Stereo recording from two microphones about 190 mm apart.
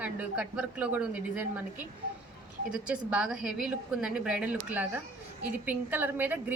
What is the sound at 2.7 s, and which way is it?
A woman's voice, 5° right (ahead or behind).